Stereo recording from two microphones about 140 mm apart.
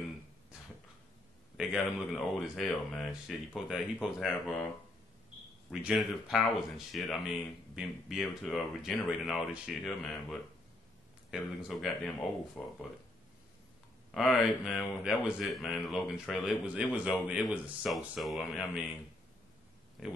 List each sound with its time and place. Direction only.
1.6 s a man's voice: 10° right (ahead or behind)
5.7 s speech: 5° right (ahead or behind)
14.1 s speech: centre (ahead or behind)